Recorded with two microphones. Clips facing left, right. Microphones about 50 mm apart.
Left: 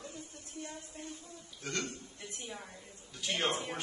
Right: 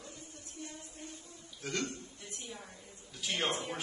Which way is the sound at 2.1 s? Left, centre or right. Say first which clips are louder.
Left 2 dB; left.